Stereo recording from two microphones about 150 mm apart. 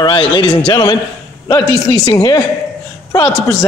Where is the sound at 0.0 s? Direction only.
35° left (ahead or behind).